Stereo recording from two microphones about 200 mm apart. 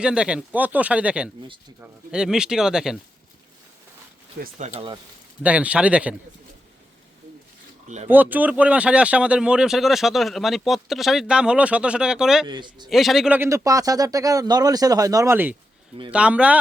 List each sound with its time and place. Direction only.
0.0 s speech: 5° right (ahead or behind)
4.4 s speech: 35° right (ahead or behind)
5.4 s a man's voice: 5° right (ahead or behind)
8.0 s speech: 10° right (ahead or behind)
12.5 s speech: 20° right (ahead or behind)
12.9 s a man's voice: centre (ahead or behind)